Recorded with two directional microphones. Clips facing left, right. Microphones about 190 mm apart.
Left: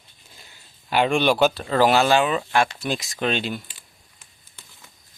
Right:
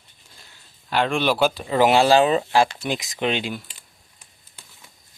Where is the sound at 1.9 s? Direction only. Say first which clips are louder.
Right 3 dB; 30° right (ahead or behind).